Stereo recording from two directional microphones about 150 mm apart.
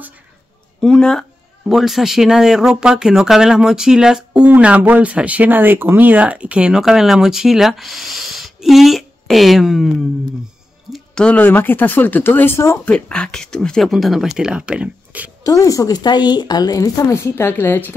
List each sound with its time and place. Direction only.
0.7 s speech: 5° left (ahead or behind)
10.9 s speech: 5° left (ahead or behind)
12.9 s speech: 5° left (ahead or behind)
15.4 s speech: 25° left (ahead or behind)